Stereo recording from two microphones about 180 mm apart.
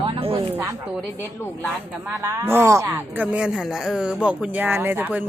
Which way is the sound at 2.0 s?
15° right (ahead or behind).